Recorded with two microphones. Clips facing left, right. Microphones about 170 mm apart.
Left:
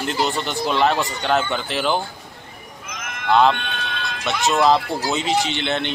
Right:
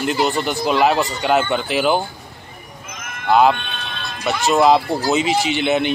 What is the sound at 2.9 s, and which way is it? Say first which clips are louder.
Horse: left 1 dB; 75° left (ahead or behind).